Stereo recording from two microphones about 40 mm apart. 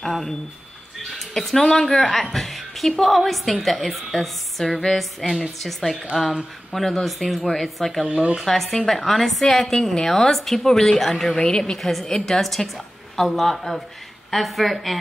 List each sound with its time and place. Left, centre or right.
0.0 s a woman's voice: centre
1.3 s a woman's voice: centre
5.2 s a woman's voice: right
5.6 s a woman's voice: centre
8.1 s a woman's voice: right
8.4 s a woman's voice: centre
11.3 s a woman's voice: centre